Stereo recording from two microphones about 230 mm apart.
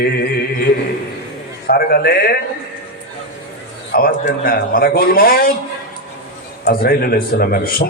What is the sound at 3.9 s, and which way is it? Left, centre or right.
A man's voice, left.